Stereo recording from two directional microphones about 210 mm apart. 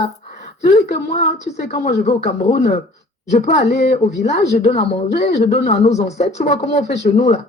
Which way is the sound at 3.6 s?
55° left (ahead or behind).